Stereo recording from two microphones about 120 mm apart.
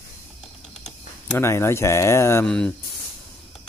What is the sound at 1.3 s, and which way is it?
Speech, 20° left (ahead or behind).